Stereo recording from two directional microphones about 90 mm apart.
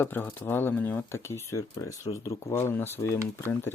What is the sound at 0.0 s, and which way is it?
Speech, 20° left (ahead or behind).